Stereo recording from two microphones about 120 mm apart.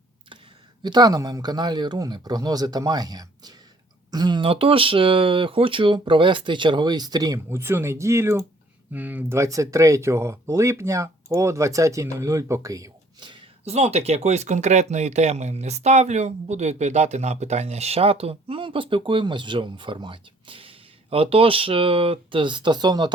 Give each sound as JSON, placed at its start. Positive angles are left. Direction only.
{"t": 0.8, "sound": "speech", "side_deg": -35}
{"t": 7.3, "sound": "speech", "side_deg": -20}
{"t": 13.7, "sound": "speech", "side_deg": -60}